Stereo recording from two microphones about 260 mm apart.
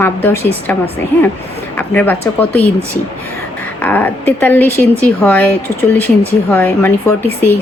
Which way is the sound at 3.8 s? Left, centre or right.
Centre.